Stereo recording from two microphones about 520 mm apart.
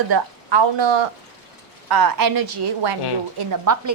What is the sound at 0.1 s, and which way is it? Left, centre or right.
Speech, right.